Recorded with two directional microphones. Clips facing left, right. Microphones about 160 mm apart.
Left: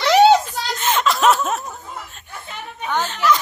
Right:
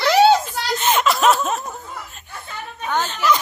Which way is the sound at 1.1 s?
Centre (ahead or behind).